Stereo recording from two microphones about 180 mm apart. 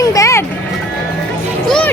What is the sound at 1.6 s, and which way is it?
Music, 5° left (ahead or behind).